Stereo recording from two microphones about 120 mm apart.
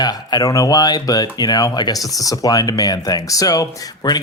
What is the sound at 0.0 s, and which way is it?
Speech, 35° left (ahead or behind).